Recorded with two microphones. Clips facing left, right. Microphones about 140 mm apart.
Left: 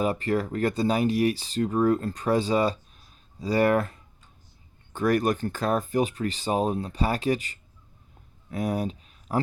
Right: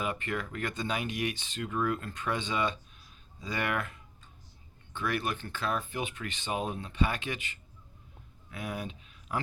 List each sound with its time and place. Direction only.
0.0 s speech: 35° left (ahead or behind)